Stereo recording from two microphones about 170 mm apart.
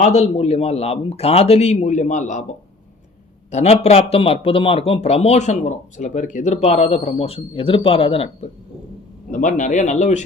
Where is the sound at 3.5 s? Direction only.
40° left (ahead or behind).